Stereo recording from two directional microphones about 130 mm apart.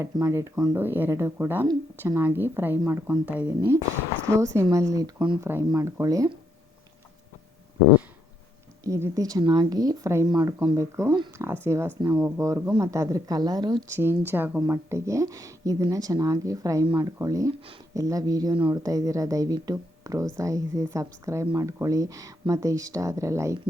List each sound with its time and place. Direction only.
0.0 s a woman's voice: 25° right (ahead or behind)
5.4 s a woman's voice: 15° right (ahead or behind)
8.8 s speech: 25° right (ahead or behind)
13.9 s speech: 20° right (ahead or behind)